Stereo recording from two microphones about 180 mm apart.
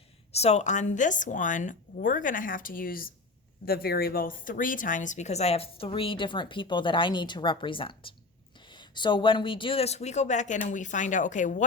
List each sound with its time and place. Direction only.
0.3 s a woman's voice: 35° left (ahead or behind)